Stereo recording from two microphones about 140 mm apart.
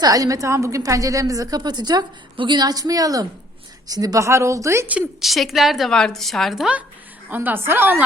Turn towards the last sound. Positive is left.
turn(degrees=-15)  # may be behind; listen again after turning